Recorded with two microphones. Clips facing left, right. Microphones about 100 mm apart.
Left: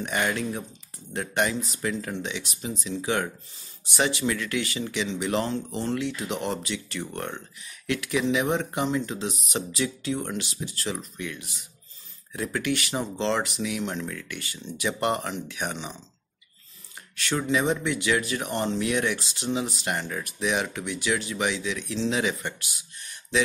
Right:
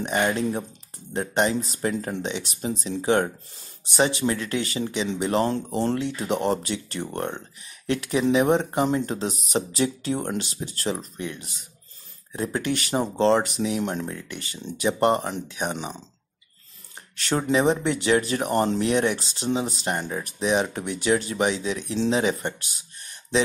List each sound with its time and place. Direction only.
0.0 s speech: 30° right (ahead or behind)
14.0 s speech: 30° right (ahead or behind)
17.2 s speech: 35° right (ahead or behind)